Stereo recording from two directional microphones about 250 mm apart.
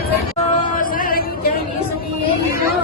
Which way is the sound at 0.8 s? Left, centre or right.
Left.